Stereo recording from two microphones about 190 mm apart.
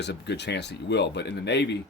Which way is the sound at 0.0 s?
65° left (ahead or behind).